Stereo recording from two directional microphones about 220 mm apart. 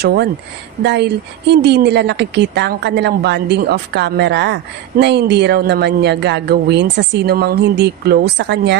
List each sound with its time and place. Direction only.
0.0 s a woman's voice: 45° right (ahead or behind)